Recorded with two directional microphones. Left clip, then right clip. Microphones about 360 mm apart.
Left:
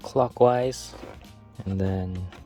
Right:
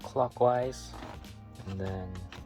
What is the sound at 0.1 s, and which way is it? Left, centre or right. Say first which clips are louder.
Speech: left 6 dB; left.